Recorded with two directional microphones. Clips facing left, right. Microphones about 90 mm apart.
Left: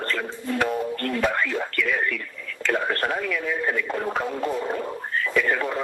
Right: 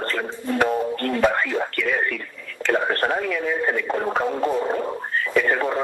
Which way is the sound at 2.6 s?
35° right (ahead or behind).